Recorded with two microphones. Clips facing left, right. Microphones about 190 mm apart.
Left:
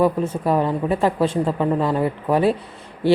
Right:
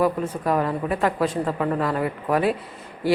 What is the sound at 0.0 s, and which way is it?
Speech, 25° left (ahead or behind).